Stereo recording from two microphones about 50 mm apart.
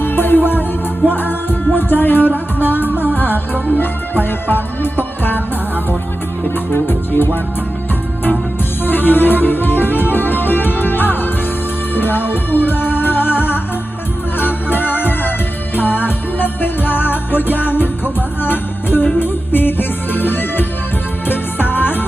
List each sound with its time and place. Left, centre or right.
0.0 s music: left
6.7 s music: left
8.8 s music: left